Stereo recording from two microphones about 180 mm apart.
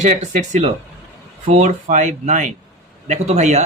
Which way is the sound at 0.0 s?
40° right (ahead or behind).